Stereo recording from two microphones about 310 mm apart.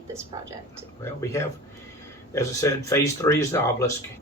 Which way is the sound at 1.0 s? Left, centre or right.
Centre.